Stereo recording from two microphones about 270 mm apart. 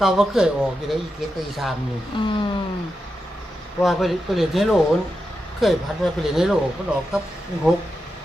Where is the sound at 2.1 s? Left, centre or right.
Centre.